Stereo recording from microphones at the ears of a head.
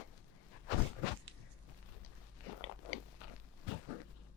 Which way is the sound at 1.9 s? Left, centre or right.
Left.